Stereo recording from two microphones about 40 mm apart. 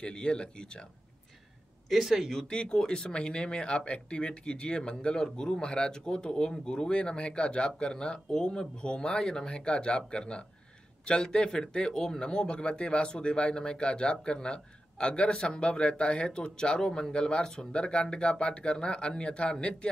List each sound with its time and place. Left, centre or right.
0.0 s speech: left
1.9 s speech: centre
2.4 s speech: left